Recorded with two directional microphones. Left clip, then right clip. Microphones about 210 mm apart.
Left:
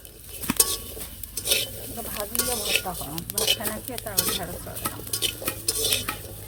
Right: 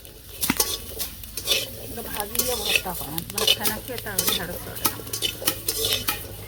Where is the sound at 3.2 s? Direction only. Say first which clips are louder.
Right 4 dB; 15° left (ahead or behind).